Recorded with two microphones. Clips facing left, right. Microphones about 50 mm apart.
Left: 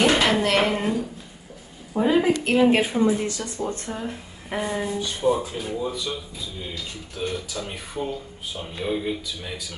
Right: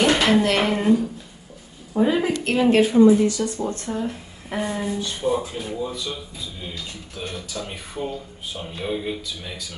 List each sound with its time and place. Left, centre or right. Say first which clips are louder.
0.0 s speech: right 2 dB; centre
2.0 s speech: even; centre
7.2 s speech: left 2 dB; centre